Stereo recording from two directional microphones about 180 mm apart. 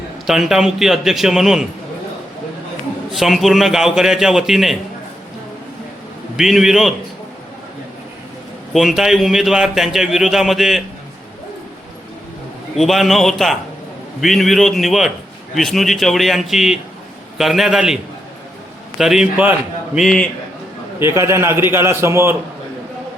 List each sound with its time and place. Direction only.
0.3 s a man's voice: centre (ahead or behind)
3.1 s a man's voice: centre (ahead or behind)
6.3 s a man's voice: centre (ahead or behind)
8.7 s a man's voice: centre (ahead or behind)
12.7 s a man's voice: centre (ahead or behind)
21.0 s a man's voice: 15° right (ahead or behind)